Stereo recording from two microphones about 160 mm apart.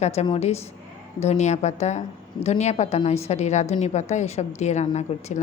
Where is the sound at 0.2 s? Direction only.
45° left (ahead or behind).